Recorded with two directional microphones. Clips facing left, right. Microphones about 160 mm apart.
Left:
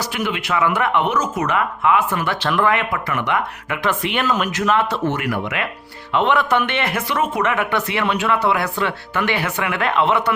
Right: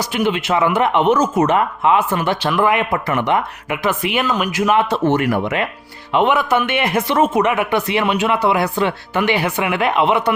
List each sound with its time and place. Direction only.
0.1 s speech: 25° right (ahead or behind)
5.1 s speech: 30° right (ahead or behind)
6.1 s speech: 10° right (ahead or behind)